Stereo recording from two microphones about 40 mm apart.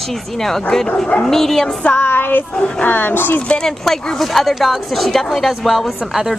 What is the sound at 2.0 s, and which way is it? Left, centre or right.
Child singing, left.